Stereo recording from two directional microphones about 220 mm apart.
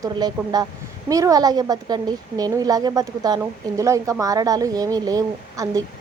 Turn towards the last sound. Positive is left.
turn(degrees=-15)  # may be behind; listen again after turning